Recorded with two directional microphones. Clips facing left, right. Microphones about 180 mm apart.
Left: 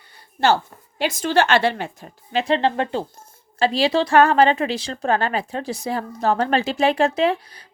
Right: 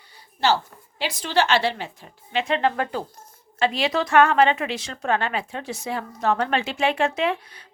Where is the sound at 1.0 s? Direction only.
45° left (ahead or behind).